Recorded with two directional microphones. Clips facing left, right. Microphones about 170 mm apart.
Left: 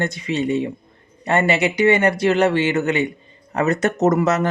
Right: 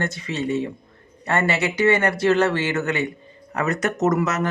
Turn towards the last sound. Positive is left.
turn(degrees=30)  # may be behind; listen again after turning